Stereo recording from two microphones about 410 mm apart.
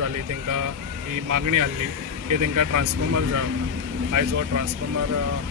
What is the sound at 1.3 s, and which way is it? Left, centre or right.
Speech, right.